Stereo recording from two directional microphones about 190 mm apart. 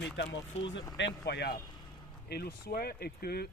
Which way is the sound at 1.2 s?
60° left (ahead or behind).